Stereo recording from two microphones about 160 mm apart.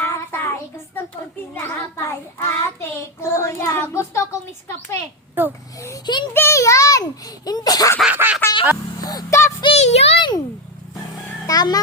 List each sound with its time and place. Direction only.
0.0 s child singing: 15° left (ahead or behind)
1.5 s speech: 15° left (ahead or behind)
5.4 s quack: 10° right (ahead or behind)
5.8 s a child's voice: 25° left (ahead or behind)
8.0 s quack: 10° right (ahead or behind)
9.0 s a sound: 20° left (ahead or behind)
9.6 s a sound: 40° left (ahead or behind)
11.4 s a child's voice: 25° left (ahead or behind)